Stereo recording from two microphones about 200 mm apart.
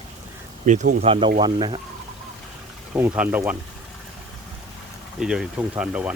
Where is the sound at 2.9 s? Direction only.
10° right (ahead or behind).